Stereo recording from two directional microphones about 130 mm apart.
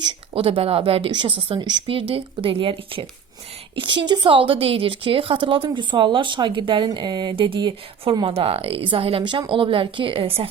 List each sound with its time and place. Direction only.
0.3 s a woman's voice: 45° right (ahead or behind)